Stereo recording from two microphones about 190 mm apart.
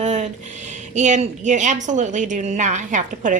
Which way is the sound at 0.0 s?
40° right (ahead or behind).